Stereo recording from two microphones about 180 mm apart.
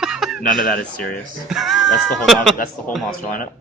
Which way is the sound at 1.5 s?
Centre (ahead or behind).